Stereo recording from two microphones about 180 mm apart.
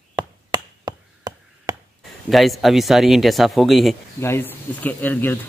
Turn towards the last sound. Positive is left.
turn(degrees=10)  # may be behind; listen again after turning